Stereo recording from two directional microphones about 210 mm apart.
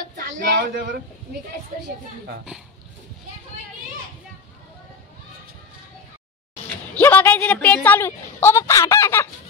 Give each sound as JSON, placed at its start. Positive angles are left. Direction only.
{"t": 0.4, "sound": "speech", "side_deg": -55}
{"t": 7.0, "sound": "a woman's voice", "side_deg": 10}